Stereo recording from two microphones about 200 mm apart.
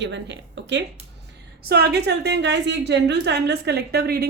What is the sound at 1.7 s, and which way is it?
A woman's voice, 55° right (ahead or behind).